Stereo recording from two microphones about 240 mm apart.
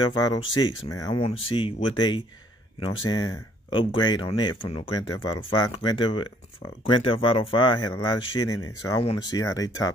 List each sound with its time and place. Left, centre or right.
0.2 s speech: centre